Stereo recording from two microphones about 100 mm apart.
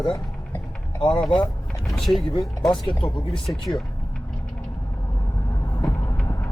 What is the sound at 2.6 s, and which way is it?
Speech, 55° left (ahead or behind).